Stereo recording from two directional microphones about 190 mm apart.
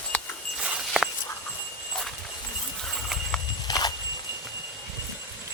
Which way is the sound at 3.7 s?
20° left (ahead or behind).